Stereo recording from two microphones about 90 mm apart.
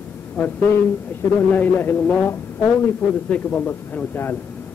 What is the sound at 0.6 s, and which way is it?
A man's voice, 25° left (ahead or behind).